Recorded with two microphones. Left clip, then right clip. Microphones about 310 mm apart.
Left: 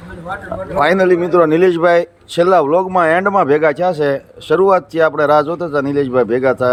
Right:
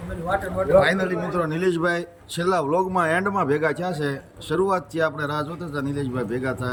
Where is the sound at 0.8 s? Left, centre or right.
Centre.